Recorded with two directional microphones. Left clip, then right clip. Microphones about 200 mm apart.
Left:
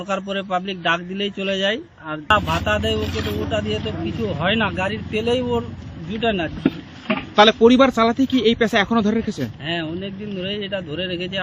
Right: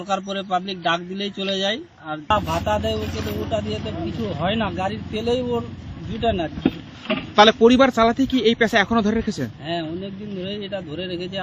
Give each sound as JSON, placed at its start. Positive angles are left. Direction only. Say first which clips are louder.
{"t": 0.1, "sound": "a man's voice", "louder": "even", "side_deg": 20}
{"t": 2.6, "sound": "speech", "louder": "left 2 dB", "side_deg": 5}
{"t": 3.0, "sound": "a man's voice", "louder": "left 3 dB", "side_deg": 25}
{"t": 3.8, "sound": "speech", "louder": "left 3 dB", "side_deg": 5}
{"t": 6.6, "sound": "a sound", "louder": "left 1 dB", "side_deg": -30}
{"t": 7.3, "sound": "speech", "louder": "left 1 dB", "side_deg": 0}